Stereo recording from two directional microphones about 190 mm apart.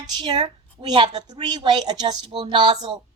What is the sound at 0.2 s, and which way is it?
A woman's voice, 25° right (ahead or behind).